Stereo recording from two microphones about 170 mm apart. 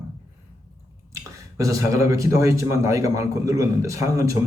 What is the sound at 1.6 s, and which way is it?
A man's voice, 20° right (ahead or behind).